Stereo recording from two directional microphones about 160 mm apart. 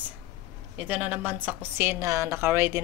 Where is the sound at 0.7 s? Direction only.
10° right (ahead or behind).